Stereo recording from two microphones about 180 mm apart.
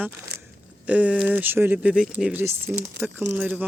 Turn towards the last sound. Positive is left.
turn(degrees=-10)  # may be behind; listen again after turning